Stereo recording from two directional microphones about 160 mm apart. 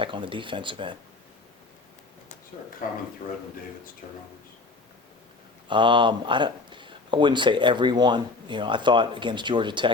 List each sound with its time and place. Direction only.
0.0 s speech: 30° right (ahead or behind)
2.8 s speech: 60° left (ahead or behind)
5.6 s speech: 30° right (ahead or behind)